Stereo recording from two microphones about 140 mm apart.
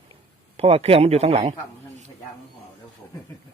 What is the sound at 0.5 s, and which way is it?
A man's voice, 45° right (ahead or behind).